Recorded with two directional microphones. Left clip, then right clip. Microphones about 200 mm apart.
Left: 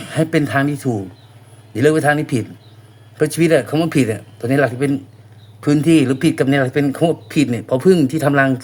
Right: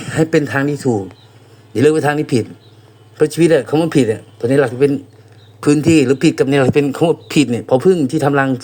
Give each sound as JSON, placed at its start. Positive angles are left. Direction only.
{"t": 0.0, "sound": "a man's voice", "side_deg": -15}
{"t": 5.5, "sound": "a man's voice", "side_deg": -30}